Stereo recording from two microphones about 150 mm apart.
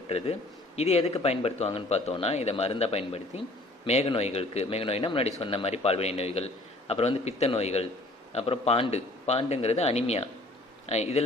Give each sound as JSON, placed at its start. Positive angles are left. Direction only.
{"t": 0.8, "sound": "a man's voice", "side_deg": 45}